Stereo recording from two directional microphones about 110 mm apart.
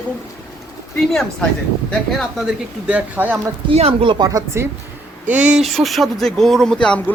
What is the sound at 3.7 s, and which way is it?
Speech, 60° right (ahead or behind).